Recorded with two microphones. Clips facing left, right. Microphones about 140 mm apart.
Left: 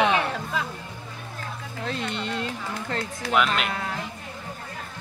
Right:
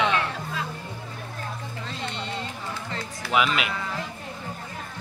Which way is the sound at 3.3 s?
5° right (ahead or behind).